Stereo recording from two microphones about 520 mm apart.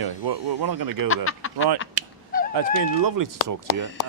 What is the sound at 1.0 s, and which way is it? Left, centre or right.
Speech, left.